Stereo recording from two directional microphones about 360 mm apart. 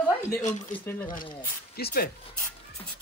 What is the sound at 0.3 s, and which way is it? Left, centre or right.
Speech, left.